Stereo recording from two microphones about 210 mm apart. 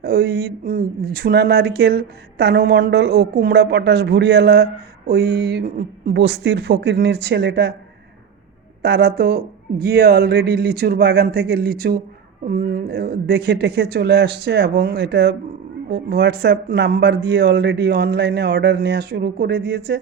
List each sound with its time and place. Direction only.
0.0 s speech: 50° right (ahead or behind)
8.8 s speech: 50° right (ahead or behind)